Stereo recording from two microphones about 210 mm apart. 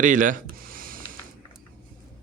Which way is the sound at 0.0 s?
40° right (ahead or behind).